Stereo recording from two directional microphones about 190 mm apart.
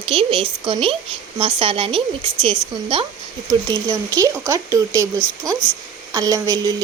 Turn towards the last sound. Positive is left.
turn(degrees=-20)  # may be behind; listen again after turning